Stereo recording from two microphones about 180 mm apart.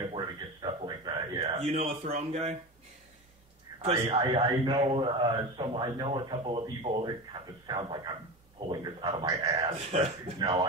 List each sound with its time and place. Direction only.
0.0 s a sound: 25° right (ahead or behind)
4.1 s speech: 30° right (ahead or behind)
9.5 s speech: 35° right (ahead or behind)